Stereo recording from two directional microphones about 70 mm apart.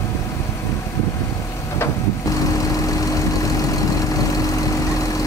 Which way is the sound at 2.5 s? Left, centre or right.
Left.